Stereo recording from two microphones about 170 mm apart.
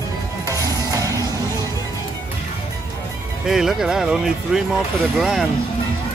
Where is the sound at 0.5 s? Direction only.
20° right (ahead or behind).